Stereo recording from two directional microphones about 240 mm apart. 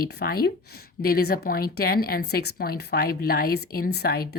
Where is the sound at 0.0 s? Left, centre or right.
Left.